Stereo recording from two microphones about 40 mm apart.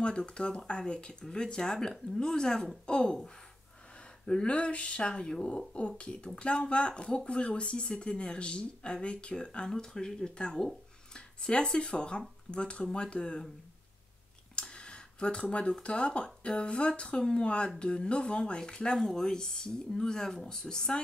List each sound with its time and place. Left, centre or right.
0.0 s speech: left
4.5 s speech: left
14.5 s a sound: left
15.4 s speech: left
18.9 s speech: centre